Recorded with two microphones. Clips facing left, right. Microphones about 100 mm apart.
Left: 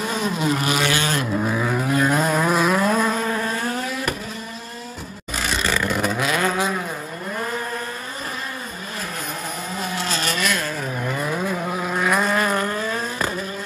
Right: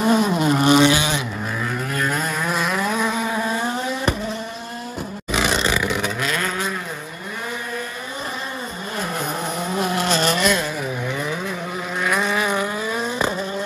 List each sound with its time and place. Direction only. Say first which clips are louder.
0.0 s vehicle: right 5 dB; centre (ahead or behind)
0.8 s vehicle: right 4 dB; 15° right (ahead or behind)
1.1 s vehicle: left 4 dB; 5° left (ahead or behind); by 4.1 s 30° right (ahead or behind)
5.3 s a sound: right 5 dB; 75° right (ahead or behind)
5.7 s vehicle: even; 5° right (ahead or behind)
10.2 s rub: right 4 dB; 30° right (ahead or behind)
11.1 s vehicle: left 2 dB; centre (ahead or behind)